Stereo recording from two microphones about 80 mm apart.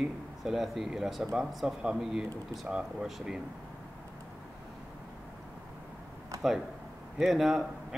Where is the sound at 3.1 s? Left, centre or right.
Centre.